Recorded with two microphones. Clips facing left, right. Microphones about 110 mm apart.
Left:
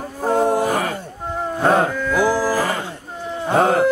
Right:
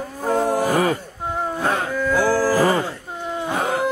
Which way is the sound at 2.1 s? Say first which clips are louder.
Left 1 dB; 15° left (ahead or behind).